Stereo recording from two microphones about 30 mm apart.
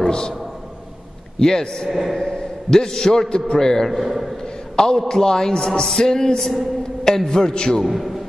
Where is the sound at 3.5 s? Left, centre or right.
Left.